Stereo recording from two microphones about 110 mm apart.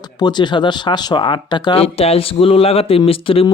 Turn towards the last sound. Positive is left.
turn(degrees=55)  # may be behind; listen again after turning